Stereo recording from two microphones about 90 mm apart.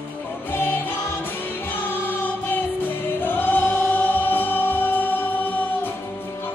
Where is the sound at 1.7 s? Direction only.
25° left (ahead or behind).